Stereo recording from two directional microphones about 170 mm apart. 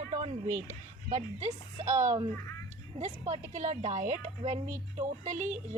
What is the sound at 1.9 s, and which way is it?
A woman's voice, 45° right (ahead or behind).